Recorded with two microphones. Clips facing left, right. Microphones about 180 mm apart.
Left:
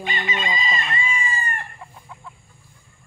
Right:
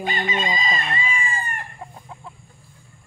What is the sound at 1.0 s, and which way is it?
Chicken, 55° right (ahead or behind).